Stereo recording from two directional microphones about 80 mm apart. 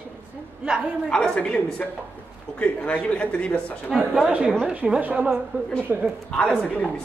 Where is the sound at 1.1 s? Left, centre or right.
Centre.